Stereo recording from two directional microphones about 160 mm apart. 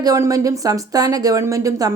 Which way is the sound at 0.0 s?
20° right (ahead or behind).